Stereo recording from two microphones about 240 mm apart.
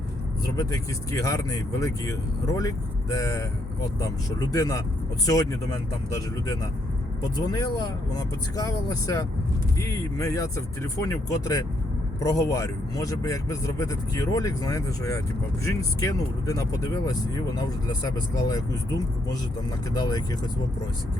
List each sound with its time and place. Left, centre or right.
0.4 s speech: centre
7.2 s speech: centre
19.9 s speech: centre